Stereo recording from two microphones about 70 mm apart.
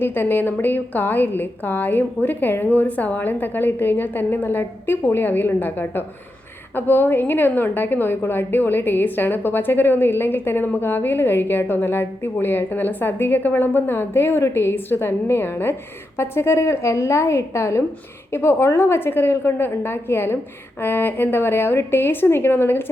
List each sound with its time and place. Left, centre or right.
0.0 s a woman's voice: left